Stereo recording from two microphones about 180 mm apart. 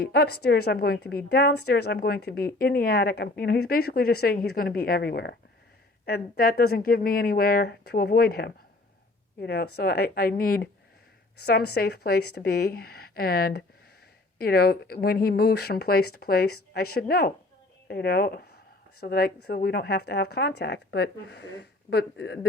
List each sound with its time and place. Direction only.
0.0 s speech: 60° left (ahead or behind)